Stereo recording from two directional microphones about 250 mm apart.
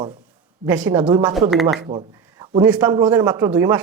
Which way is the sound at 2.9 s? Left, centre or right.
Centre.